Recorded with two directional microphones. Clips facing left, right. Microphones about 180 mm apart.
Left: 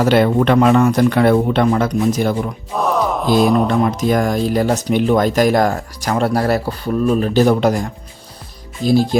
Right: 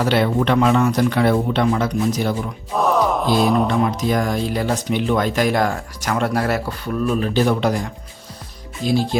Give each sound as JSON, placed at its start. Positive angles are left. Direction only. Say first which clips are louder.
{"t": 0.0, "sound": "speech", "louder": "left 5 dB", "side_deg": 50}
{"t": 2.7, "sound": "mantra", "louder": "even", "side_deg": 0}
{"t": 3.8, "sound": "speech", "louder": "left 4 dB", "side_deg": 50}